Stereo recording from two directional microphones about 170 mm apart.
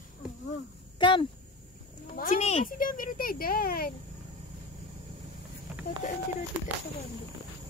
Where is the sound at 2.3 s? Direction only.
40° left (ahead or behind).